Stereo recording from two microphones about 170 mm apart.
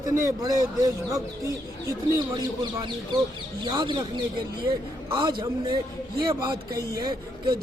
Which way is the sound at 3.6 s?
25° right (ahead or behind).